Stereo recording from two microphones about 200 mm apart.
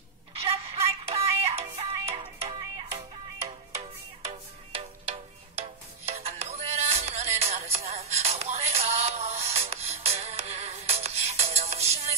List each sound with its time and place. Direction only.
0.3 s music: 30° right (ahead or behind)
4.7 s music: 30° right (ahead or behind)